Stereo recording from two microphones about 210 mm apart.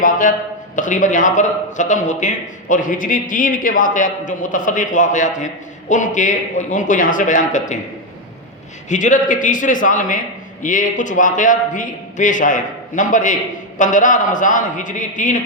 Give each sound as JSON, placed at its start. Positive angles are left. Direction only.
{"t": 0.0, "sound": "a man's voice", "side_deg": 40}
{"t": 8.9, "sound": "a man's voice", "side_deg": 35}